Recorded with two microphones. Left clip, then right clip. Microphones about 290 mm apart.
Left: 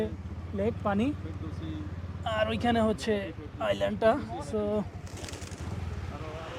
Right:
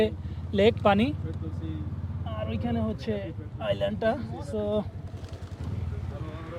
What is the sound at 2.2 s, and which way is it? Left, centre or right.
Speech, left.